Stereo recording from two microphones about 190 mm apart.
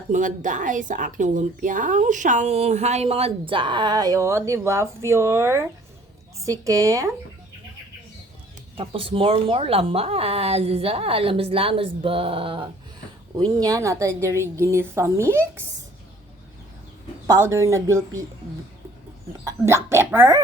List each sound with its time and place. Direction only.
0.1 s a woman's voice: 40° right (ahead or behind); by 7.1 s 15° right (ahead or behind)
8.7 s a woman's voice: 30° right (ahead or behind); by 15.6 s 10° right (ahead or behind)
17.2 s a woman's voice: 15° right (ahead or behind)
19.5 s a woman's voice: 15° right (ahead or behind)